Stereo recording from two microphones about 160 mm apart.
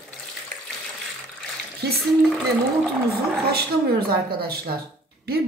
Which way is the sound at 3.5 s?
75° right (ahead or behind).